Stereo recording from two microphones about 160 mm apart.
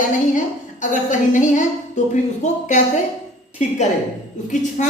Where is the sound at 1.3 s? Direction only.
50° left (ahead or behind).